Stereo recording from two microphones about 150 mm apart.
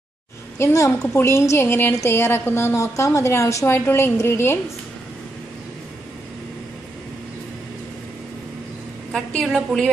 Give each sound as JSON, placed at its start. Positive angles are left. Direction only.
{"t": 0.6, "sound": "a woman's voice", "side_deg": 20}
{"t": 9.1, "sound": "a woman's voice", "side_deg": 5}